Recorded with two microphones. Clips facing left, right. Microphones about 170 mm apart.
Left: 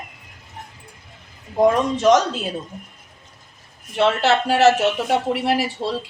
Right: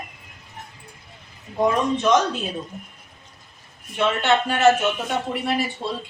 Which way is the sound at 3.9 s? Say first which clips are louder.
Left 3 dB; 85° left.